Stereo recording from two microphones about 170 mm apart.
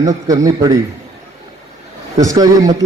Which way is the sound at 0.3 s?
20° right (ahead or behind).